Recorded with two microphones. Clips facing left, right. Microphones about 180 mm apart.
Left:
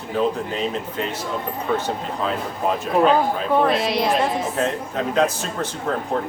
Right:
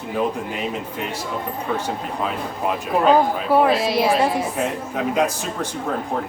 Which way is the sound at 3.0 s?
10° right (ahead or behind).